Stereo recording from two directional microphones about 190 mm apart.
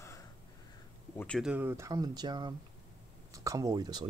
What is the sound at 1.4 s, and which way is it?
Speech, 5° right (ahead or behind).